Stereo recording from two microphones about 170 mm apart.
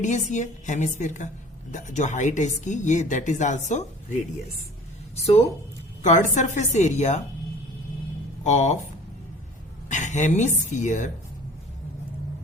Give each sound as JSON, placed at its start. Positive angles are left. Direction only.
{"t": 0.0, "sound": "speech", "side_deg": 45}
{"t": 5.1, "sound": "a woman's voice", "side_deg": 40}
{"t": 8.4, "sound": "speech", "side_deg": 45}
{"t": 9.9, "sound": "speech", "side_deg": 45}